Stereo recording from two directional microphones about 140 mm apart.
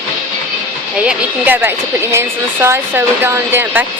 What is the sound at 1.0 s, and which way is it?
Speech, 15° right (ahead or behind).